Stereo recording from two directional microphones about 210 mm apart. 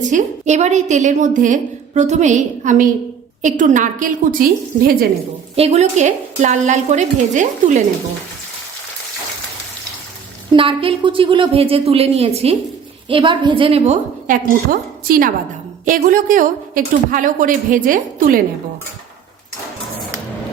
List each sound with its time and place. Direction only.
0.1 s a woman's voice: 35° right (ahead or behind)
5.5 s a woman's voice: 30° right (ahead or behind)
10.5 s a woman's voice: 25° right (ahead or behind); by 18.3 s 40° right (ahead or behind)